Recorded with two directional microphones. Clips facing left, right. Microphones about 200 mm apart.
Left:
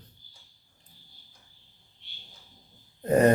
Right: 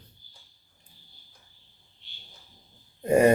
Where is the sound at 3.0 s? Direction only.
10° right (ahead or behind).